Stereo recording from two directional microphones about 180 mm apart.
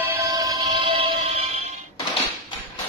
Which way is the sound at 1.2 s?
40° right (ahead or behind).